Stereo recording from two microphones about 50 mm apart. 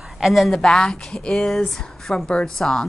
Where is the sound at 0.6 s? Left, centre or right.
Centre.